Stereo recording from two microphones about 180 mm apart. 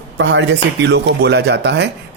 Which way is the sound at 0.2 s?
75° right (ahead or behind).